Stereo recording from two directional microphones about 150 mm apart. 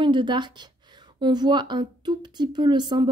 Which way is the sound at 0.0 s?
30° right (ahead or behind).